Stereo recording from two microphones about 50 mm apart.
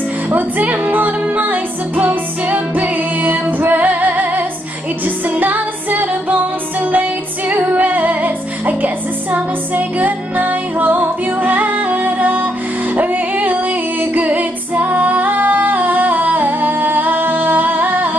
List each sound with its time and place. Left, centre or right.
0.3 s music: right
12.9 s female singing: right